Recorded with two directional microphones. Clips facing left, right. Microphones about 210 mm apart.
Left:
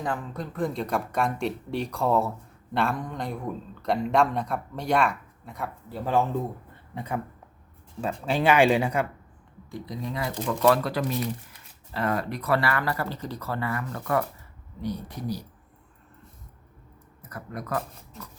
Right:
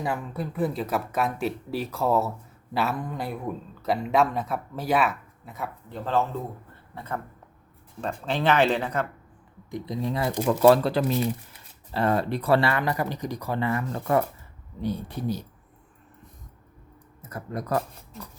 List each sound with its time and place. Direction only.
0.0 s a man's voice: 10° right (ahead or behind)
6.9 s speech: 15° left (ahead or behind)
9.6 s speech: 20° right (ahead or behind)
17.2 s speech: 25° right (ahead or behind)